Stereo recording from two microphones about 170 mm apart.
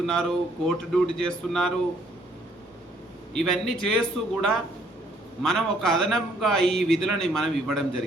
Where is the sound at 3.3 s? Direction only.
5° left (ahead or behind).